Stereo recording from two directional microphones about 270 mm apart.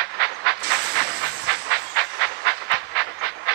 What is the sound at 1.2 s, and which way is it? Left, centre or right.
Train, right.